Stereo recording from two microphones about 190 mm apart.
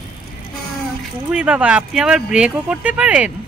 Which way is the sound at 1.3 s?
5° right (ahead or behind).